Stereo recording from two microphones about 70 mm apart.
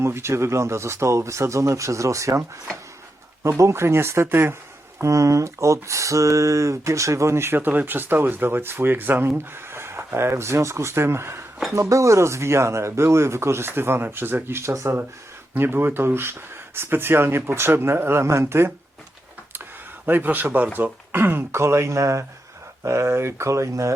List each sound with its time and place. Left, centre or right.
0.0 s speech: right
3.6 s speech: right
4.9 s speech: right
11.7 s speech: right
20.1 s speech: right